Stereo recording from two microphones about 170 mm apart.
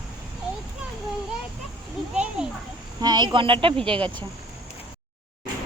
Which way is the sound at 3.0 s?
25° right (ahead or behind).